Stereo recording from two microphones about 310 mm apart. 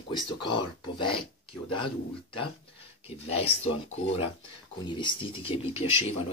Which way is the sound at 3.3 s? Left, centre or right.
Centre.